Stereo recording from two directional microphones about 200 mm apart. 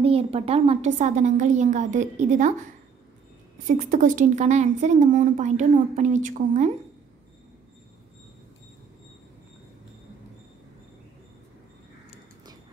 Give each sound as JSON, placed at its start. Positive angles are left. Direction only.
{"t": 0.0, "sound": "speech", "side_deg": -30}
{"t": 3.6, "sound": "speech", "side_deg": -40}